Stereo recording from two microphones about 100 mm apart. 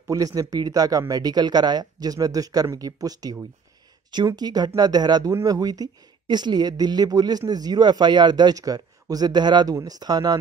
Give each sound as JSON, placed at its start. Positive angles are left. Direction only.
{"t": 0.1, "sound": "speech", "side_deg": -35}